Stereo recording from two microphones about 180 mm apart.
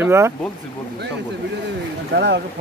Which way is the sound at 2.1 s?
70° right (ahead or behind).